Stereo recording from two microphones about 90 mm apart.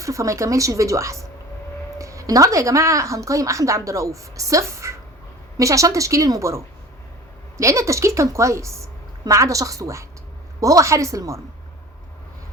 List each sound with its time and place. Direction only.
0.0 s a woman's voice: 35° right (ahead or behind)
7.6 s a woman's voice: 35° right (ahead or behind)